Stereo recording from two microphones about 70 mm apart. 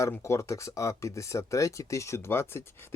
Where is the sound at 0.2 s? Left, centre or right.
Left.